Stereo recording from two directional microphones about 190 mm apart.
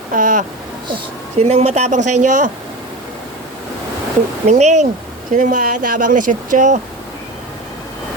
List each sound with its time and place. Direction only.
0.1 s speech: 45° right (ahead or behind)
4.4 s speech: 35° right (ahead or behind)